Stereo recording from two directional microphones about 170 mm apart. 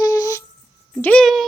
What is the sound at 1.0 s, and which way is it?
Speech, 5° left (ahead or behind).